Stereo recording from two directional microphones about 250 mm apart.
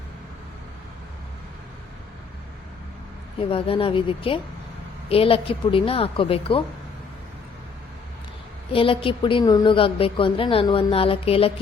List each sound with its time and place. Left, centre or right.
3.5 s a woman's voice: left
8.7 s a woman's voice: left